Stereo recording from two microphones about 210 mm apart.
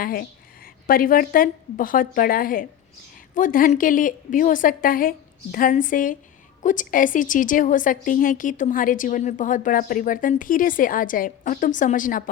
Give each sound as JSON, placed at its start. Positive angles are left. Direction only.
{"t": 0.0, "sound": "a woman's voice", "side_deg": 45}